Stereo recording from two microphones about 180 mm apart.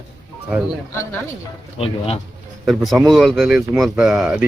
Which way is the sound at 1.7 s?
35° left (ahead or behind).